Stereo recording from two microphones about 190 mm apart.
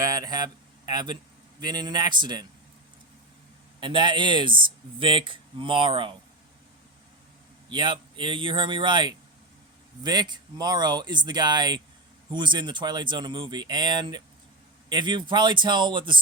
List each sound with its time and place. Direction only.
0.0 s speech: 20° right (ahead or behind)
3.8 s speech: 25° right (ahead or behind)
7.7 s speech: 25° right (ahead or behind)